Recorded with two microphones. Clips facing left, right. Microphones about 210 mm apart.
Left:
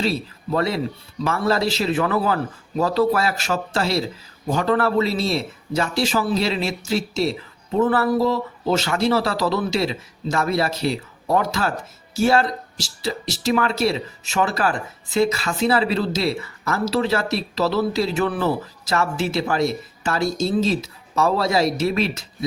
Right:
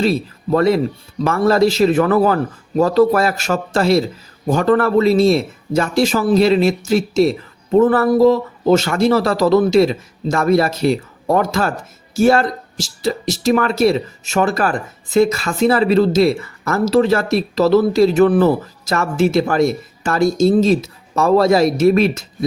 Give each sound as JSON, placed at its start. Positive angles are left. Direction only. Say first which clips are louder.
{"t": 0.0, "sound": "speech", "louder": "right 6 dB", "side_deg": -50}